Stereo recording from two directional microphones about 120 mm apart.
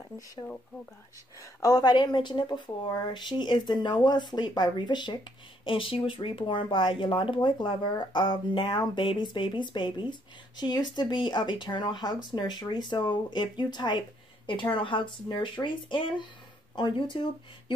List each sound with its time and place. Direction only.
1.6 s speech: 30° left (ahead or behind)